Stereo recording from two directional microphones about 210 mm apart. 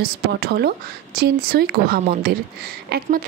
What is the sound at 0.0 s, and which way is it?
Speech, 50° right (ahead or behind).